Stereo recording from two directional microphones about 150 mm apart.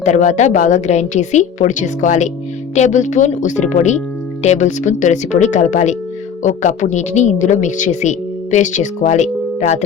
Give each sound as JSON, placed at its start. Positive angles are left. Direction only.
{"t": 0.0, "sound": "speech", "side_deg": 55}